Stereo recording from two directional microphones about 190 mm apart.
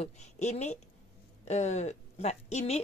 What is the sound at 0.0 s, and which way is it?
A woman's voice, 35° left (ahead or behind).